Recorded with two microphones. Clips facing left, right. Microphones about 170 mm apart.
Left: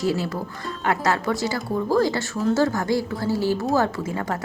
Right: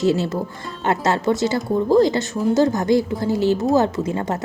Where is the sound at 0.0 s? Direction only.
25° right (ahead or behind).